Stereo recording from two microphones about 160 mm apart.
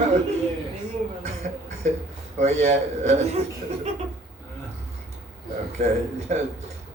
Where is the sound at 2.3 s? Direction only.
45° right (ahead or behind).